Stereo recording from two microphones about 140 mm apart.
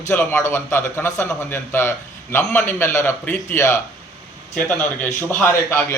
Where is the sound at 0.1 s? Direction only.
15° left (ahead or behind).